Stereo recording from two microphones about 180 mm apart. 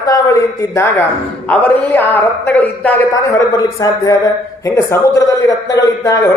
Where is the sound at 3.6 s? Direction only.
20° left (ahead or behind).